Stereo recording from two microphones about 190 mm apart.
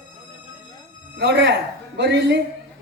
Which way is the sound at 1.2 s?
65° right (ahead or behind).